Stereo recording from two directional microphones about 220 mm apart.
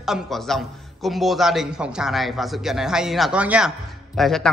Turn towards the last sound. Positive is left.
turn(degrees=0)  # may be behind; listen again after turning